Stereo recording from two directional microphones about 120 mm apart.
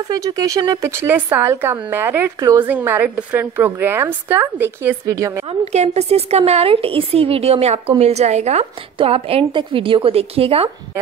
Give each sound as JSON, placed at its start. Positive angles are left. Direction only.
{"t": 0.1, "sound": "a woman's voice", "side_deg": -30}
{"t": 5.5, "sound": "a woman's voice", "side_deg": -65}
{"t": 8.9, "sound": "a woman's voice", "side_deg": -50}